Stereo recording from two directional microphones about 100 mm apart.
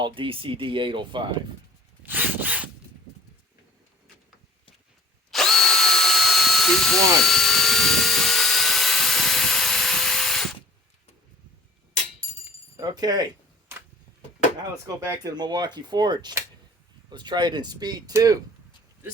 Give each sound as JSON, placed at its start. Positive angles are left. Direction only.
{"t": 0.0, "sound": "speech", "side_deg": -60}
{"t": 2.0, "sound": "rub", "side_deg": -15}
{"t": 5.3, "sound": "drill", "side_deg": 5}
{"t": 12.7, "sound": "chink", "side_deg": -40}
{"t": 15.2, "sound": "speech", "side_deg": -45}